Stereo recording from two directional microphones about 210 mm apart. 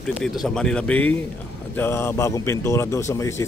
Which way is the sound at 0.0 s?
Centre (ahead or behind).